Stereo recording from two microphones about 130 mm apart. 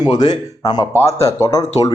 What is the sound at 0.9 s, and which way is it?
Speech, 20° left (ahead or behind).